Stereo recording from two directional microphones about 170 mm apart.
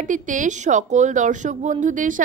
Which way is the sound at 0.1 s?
50° right (ahead or behind).